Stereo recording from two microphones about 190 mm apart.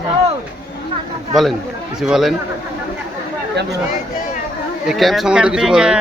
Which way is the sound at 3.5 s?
65° right (ahead or behind).